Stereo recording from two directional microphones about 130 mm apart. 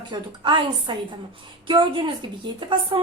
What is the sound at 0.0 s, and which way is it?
Speech, 35° right (ahead or behind).